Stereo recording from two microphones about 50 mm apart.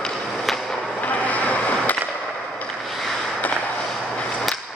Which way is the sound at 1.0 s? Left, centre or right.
Left.